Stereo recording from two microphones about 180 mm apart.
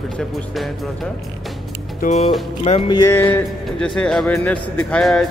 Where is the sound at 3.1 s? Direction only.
10° left (ahead or behind).